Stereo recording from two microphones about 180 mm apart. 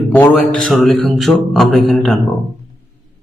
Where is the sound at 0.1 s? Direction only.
10° left (ahead or behind).